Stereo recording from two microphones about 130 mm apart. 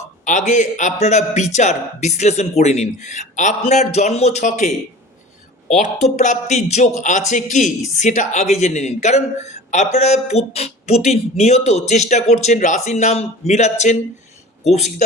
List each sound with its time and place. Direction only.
0.3 s a man's voice: 70° left (ahead or behind)